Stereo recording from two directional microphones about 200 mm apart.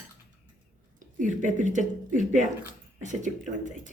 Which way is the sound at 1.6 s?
40° right (ahead or behind).